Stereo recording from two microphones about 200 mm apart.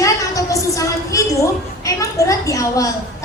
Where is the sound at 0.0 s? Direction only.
15° left (ahead or behind).